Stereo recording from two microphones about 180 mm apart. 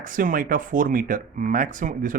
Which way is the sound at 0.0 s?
45° right (ahead or behind).